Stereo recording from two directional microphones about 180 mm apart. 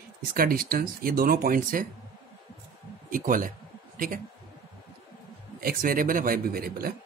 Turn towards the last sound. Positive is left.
turn(degrees=-55)  # may be behind; listen again after turning